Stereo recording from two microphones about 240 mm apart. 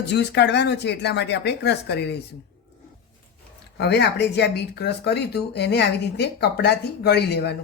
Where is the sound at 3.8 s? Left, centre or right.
Left.